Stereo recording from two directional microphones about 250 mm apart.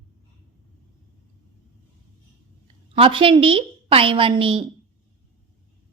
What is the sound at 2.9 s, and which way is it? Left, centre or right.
A woman's voice, right.